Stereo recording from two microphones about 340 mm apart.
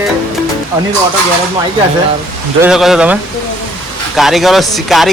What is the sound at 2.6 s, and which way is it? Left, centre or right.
Speech, centre.